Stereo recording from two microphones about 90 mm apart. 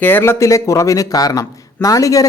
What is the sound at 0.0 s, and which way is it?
Speech, 25° left (ahead or behind).